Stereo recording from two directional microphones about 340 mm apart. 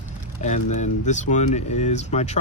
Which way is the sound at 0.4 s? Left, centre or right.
Left.